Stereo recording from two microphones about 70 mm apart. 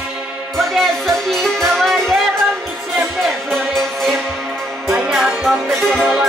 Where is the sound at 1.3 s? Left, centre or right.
Centre.